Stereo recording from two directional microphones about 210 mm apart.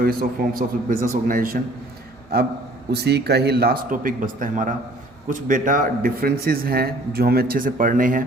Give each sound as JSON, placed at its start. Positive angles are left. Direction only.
{"t": 0.0, "sound": "a man's voice", "side_deg": -45}